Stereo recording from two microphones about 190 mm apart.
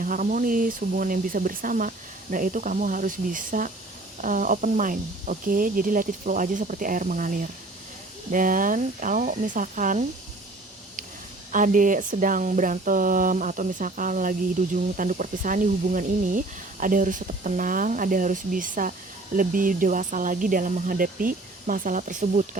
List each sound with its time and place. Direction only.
0.0 s speech: 45° right (ahead or behind)
11.5 s speech: 45° right (ahead or behind)